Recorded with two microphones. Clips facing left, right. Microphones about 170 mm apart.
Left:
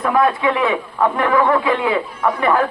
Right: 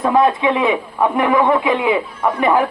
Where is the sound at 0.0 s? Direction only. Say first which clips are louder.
Right 2 dB; 20° right (ahead or behind).